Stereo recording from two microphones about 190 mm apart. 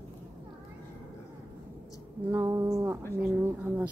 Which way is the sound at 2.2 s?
15° right (ahead or behind).